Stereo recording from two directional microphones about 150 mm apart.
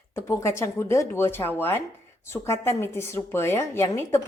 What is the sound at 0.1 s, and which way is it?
A woman's voice, 20° left (ahead or behind).